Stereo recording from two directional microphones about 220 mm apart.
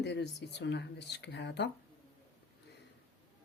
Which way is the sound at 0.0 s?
50° left (ahead or behind).